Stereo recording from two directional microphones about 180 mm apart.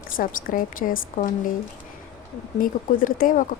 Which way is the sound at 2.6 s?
50° left (ahead or behind).